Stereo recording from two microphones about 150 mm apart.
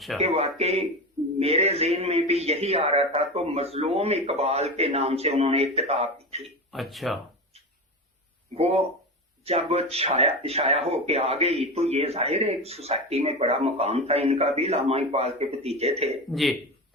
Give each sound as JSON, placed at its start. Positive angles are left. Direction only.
{"t": 0.2, "sound": "speech", "side_deg": -45}
{"t": 6.7, "sound": "speech", "side_deg": 0}
{"t": 8.5, "sound": "speech", "side_deg": -45}
{"t": 16.3, "sound": "a man's voice", "side_deg": 0}